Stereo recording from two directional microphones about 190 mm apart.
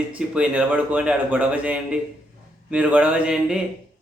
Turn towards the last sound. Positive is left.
turn(degrees=-5)  # may be behind; listen again after turning